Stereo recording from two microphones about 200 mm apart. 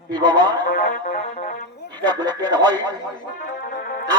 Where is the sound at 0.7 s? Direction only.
40° left (ahead or behind).